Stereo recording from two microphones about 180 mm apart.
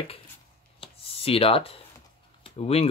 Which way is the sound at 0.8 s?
30° left (ahead or behind).